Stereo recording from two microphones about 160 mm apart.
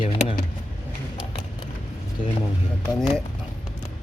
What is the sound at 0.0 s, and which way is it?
Vehicle, 35° left (ahead or behind).